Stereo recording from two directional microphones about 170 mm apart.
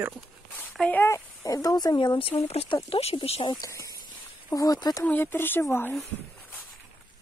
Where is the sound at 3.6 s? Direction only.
20° left (ahead or behind).